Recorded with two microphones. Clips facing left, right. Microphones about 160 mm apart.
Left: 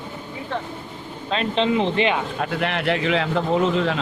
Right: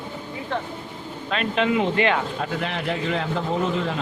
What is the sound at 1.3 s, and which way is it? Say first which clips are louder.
Speech: left 1 dB; 30° left (ahead or behind).